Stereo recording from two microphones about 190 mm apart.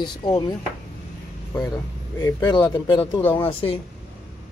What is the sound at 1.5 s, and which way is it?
Speech, 20° left (ahead or behind).